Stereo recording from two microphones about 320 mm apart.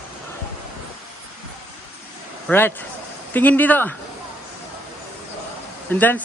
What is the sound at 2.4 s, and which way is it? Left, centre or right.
A man's voice, centre.